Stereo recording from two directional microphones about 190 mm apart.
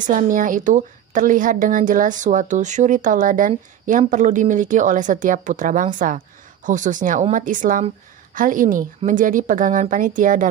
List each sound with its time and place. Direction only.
0.0 s speech: 45° right (ahead or behind)